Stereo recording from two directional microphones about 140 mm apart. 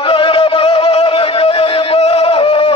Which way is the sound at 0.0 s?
40° left (ahead or behind).